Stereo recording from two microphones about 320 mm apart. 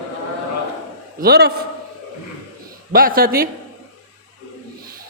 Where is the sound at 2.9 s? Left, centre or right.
Right.